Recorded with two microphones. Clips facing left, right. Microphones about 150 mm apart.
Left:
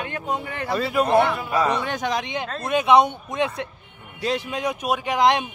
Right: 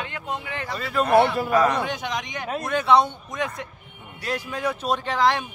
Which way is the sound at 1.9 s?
40° left (ahead or behind).